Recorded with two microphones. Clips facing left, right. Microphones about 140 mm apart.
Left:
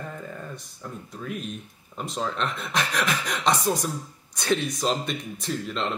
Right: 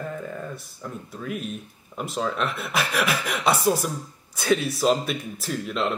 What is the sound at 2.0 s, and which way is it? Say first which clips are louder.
Speech: right 2 dB; 5° right (ahead or behind).